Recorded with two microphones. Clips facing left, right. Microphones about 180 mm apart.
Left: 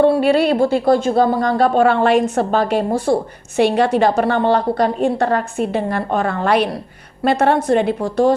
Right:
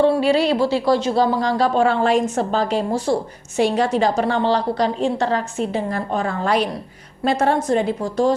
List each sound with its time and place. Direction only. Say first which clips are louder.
0.0 s a woman's voice: left 3 dB; 55° left (ahead or behind)